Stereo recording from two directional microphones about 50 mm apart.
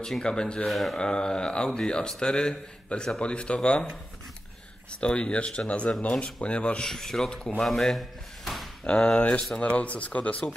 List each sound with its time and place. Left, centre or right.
0.2 s speech: centre
0.7 s speech: centre
0.9 s speech: centre
5.0 s speech: left
6.9 s speech: centre
8.8 s speech: left